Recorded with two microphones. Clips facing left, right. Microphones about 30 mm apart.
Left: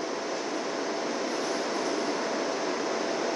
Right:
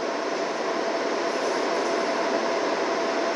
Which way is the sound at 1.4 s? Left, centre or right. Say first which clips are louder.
Right 5 dB; right.